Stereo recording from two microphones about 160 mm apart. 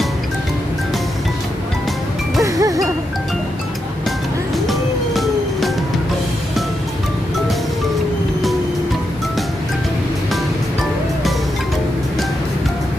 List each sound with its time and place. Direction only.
2.4 s music: 20° right (ahead or behind)
4.6 s music: centre (ahead or behind)